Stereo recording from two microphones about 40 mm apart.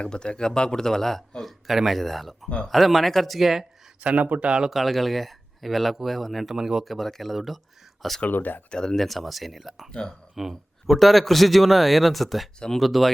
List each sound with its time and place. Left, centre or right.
0.0 s speech: left; by 3.7 s centre
4.0 s speech: right
4.4 s speech: right
4.7 s speech: centre
6.8 s speech: centre
8.3 s speech: left
8.7 s speech: centre
9.0 s speech: centre
9.9 s speech: centre
10.3 s speech: centre
10.8 s speech: centre